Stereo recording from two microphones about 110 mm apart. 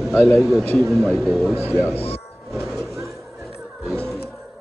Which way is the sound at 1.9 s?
65° left (ahead or behind).